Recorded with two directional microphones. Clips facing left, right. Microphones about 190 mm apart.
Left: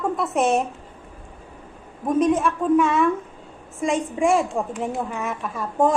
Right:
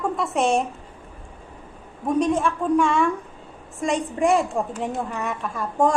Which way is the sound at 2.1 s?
5° left (ahead or behind).